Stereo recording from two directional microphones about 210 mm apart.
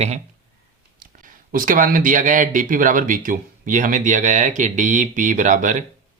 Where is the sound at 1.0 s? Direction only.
40° right (ahead or behind).